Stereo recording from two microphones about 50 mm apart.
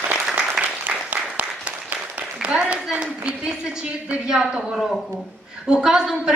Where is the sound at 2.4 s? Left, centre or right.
Right.